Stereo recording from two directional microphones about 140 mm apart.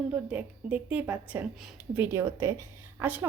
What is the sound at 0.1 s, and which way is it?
A woman's voice, 10° right (ahead or behind).